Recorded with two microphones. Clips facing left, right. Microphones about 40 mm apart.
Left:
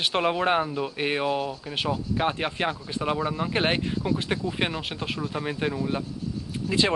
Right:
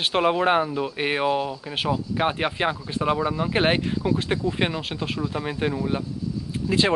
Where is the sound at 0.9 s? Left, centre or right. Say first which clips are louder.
Right 3 dB; centre.